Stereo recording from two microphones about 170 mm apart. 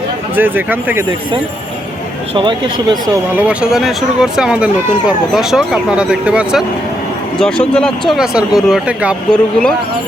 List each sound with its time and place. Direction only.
0.3 s speech: 10° right (ahead or behind)
2.3 s speech: 30° right (ahead or behind)
3.3 s speech: 10° right (ahead or behind)
9.3 s speech: 5° left (ahead or behind)